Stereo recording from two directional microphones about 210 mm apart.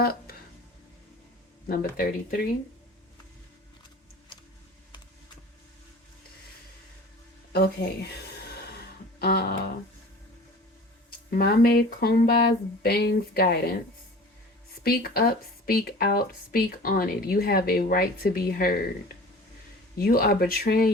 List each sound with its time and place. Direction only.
0.0 s speech: 45° left (ahead or behind)
1.6 s a woman's voice: 45° left (ahead or behind)
7.5 s music: 50° left (ahead or behind)
11.3 s a woman's voice: 45° left (ahead or behind)
14.8 s a woman's voice: 45° left (ahead or behind)
20.0 s a woman's voice: 45° left (ahead or behind)